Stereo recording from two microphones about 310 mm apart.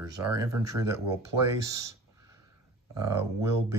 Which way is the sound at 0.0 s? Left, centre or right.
Centre.